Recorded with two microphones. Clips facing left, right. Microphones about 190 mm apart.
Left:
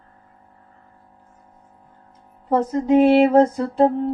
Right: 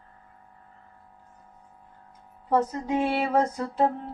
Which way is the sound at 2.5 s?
25° left (ahead or behind).